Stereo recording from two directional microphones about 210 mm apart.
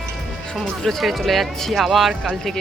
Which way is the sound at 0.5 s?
Centre (ahead or behind).